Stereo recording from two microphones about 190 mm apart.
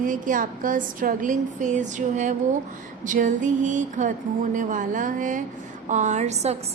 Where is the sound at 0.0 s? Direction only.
45° right (ahead or behind).